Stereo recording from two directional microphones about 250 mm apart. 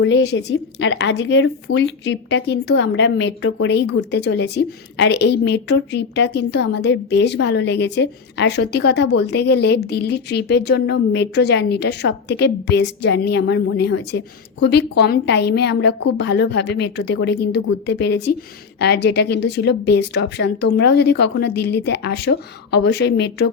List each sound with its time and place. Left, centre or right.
0.0 s a woman's voice: left